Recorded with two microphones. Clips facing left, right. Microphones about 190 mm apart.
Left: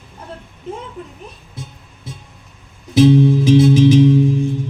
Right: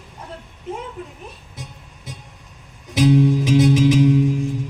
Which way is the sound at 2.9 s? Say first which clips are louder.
Left 4 dB; 30° left (ahead or behind).